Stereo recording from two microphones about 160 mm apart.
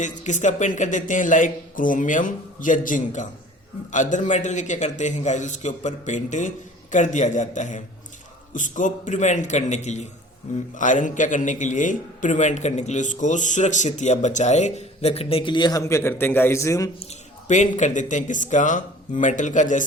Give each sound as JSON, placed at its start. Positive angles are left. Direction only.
{"t": 0.0, "sound": "a man's voice", "side_deg": 50}
{"t": 17.0, "sound": "a man's voice", "side_deg": 45}